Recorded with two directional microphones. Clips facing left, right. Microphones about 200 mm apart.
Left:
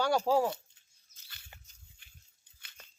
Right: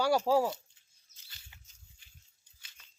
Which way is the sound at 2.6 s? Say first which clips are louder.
Left 7 dB; 60° left (ahead or behind).